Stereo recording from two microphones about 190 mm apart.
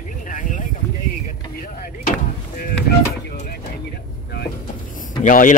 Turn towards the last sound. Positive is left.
turn(degrees=45)  # may be behind; listen again after turning